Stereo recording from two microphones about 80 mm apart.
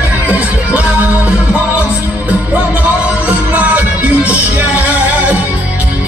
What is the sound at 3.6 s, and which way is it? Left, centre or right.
Music, centre.